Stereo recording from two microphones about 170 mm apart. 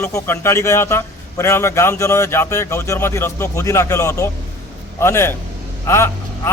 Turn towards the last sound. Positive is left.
turn(degrees=15)  # may be behind; listen again after turning